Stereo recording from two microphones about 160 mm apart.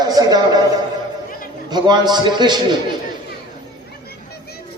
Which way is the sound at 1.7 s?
25° right (ahead or behind).